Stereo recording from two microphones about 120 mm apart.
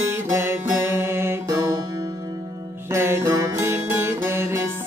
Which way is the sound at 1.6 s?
30° right (ahead or behind).